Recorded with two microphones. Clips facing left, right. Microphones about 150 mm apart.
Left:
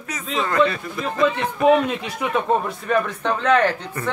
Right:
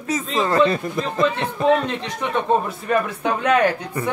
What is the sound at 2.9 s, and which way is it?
Speech, 10° right (ahead or behind).